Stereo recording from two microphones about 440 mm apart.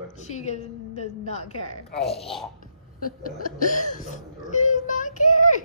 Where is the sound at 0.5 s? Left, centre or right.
Centre.